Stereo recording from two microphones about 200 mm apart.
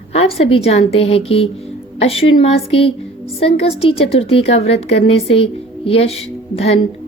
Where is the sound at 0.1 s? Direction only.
30° left (ahead or behind).